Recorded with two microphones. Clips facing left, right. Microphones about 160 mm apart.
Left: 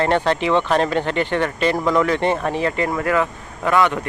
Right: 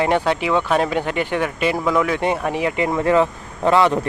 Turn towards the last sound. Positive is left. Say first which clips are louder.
# right 2 dB
turn(degrees=-30)  # may be behind; listen again after turning